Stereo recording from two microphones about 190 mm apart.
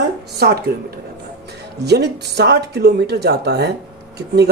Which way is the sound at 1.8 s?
60° right (ahead or behind).